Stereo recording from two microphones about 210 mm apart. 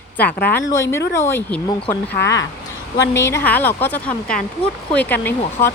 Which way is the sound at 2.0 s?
60° left (ahead or behind).